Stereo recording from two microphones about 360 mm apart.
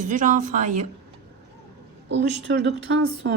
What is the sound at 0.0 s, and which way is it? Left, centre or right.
Speech, right.